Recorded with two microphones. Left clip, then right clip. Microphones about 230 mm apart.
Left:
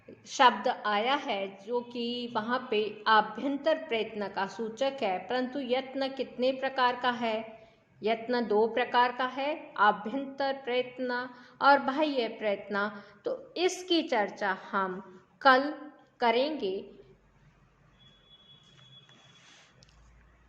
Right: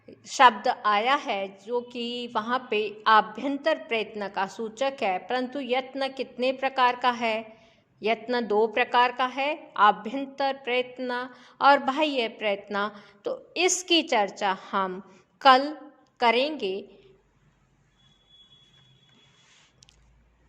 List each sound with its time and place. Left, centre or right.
0.1 s a woman's voice: right